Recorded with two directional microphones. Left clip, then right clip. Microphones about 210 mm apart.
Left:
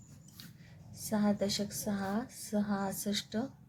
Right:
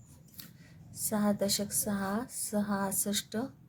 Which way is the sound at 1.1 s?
20° right (ahead or behind).